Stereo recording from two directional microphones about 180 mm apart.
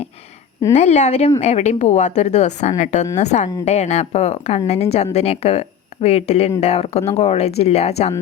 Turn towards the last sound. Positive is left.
turn(degrees=35)  # may be behind; listen again after turning